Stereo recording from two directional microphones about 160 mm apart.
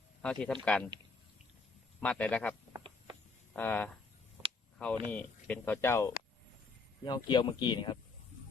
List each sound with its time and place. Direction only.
0.2 s speech: 5° left (ahead or behind)
2.0 s speech: 10° left (ahead or behind)
2.7 s a sound: 25° right (ahead or behind)
3.5 s speech: 10° left (ahead or behind)
7.3 s speech: 30° left (ahead or behind)